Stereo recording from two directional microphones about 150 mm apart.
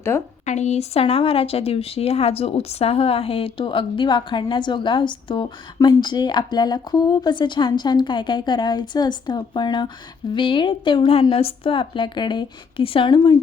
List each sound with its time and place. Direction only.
0.4 s speech: 50° left (ahead or behind); by 13.4 s 30° left (ahead or behind)